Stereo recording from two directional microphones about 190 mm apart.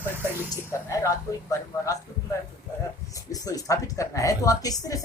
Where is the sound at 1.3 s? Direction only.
15° left (ahead or behind).